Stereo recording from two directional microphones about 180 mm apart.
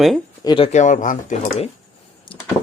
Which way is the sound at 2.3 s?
30° left (ahead or behind).